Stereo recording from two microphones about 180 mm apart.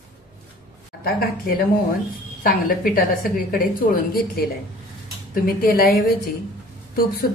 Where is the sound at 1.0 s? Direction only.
55° left (ahead or behind).